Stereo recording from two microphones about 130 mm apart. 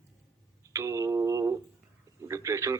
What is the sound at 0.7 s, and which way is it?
Mantra, 25° right (ahead or behind).